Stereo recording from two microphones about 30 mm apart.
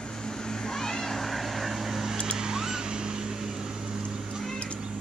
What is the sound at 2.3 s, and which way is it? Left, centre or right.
Vehicle, right.